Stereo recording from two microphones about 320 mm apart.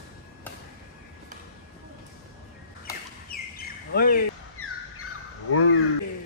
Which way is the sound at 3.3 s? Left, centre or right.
Left.